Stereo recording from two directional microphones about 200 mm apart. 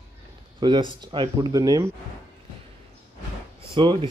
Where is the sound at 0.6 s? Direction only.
20° right (ahead or behind).